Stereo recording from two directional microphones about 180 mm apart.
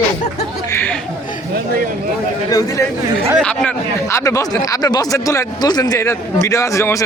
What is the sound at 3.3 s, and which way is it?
Speech, 5° left (ahead or behind).